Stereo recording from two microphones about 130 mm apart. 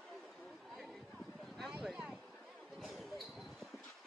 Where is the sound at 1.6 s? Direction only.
5° right (ahead or behind).